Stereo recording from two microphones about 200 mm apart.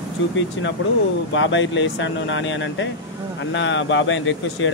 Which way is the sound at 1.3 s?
70° left (ahead or behind).